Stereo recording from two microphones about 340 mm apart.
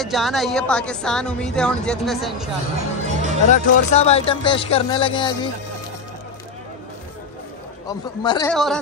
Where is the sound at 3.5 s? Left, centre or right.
Centre.